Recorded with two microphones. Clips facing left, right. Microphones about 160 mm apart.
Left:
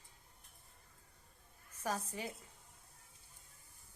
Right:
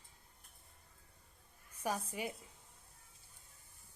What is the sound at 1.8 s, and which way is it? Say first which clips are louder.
Speech: right 1 dB; 15° right (ahead or behind).